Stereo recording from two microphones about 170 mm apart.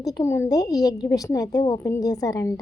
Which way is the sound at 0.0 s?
15° left (ahead or behind).